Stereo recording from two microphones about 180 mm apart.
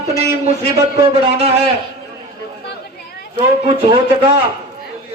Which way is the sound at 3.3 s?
30° right (ahead or behind).